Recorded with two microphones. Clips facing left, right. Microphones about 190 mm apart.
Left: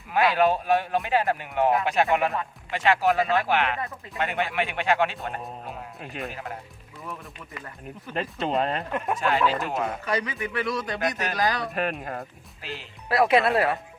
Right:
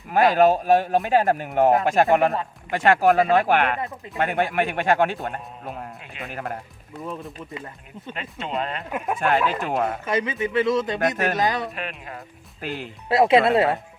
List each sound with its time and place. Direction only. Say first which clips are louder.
0.1 s speech: right 5 dB; 45° right (ahead or behind)
3.8 s speech: right 3 dB; 20° right (ahead or behind)
4.2 s speech: right 5 dB; 50° right (ahead or behind)
6.3 s speech: right 5 dB; 55° right (ahead or behind)
7.0 s speech: right 6 dB; 20° right (ahead or behind)
8.1 s speech: left 4 dB; 40° left (ahead or behind)
8.9 s speech: right 1 dB; 5° right (ahead or behind)
9.1 s speech: right 2 dB; 50° right (ahead or behind)
10.1 s speech: right 4 dB; 20° right (ahead or behind)
11.7 s speech: left 5 dB; 45° left (ahead or behind)
12.6 s speech: right 7 dB; 55° right (ahead or behind)
13.1 s speech: right 4 dB; 25° right (ahead or behind)